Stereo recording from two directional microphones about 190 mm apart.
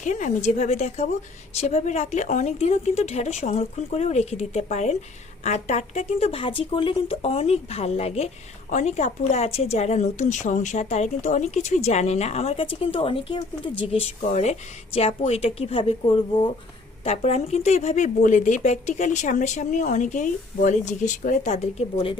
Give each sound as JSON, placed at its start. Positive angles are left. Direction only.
{"t": 0.0, "sound": "speech", "side_deg": 40}